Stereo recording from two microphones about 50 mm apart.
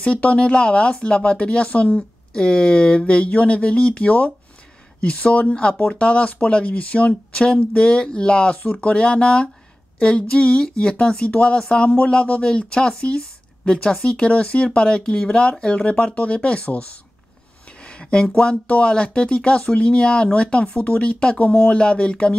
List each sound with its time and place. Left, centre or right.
0.0 s speech: left